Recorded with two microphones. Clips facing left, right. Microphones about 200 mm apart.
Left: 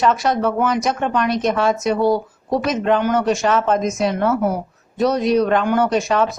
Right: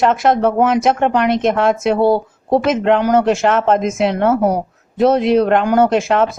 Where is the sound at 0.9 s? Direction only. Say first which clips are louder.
Right 5 dB; 70° right (ahead or behind).